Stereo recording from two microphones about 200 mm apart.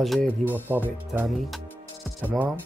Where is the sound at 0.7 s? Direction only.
10° right (ahead or behind).